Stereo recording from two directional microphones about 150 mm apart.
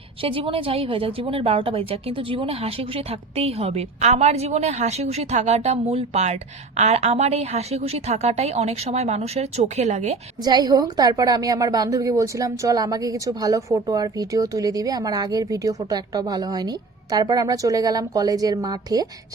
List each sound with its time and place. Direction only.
0.2 s a woman's voice: 35° right (ahead or behind)
10.4 s a woman's voice: 25° right (ahead or behind)